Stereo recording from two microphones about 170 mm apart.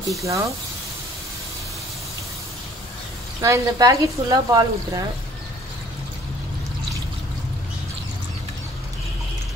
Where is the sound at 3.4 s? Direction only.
20° right (ahead or behind).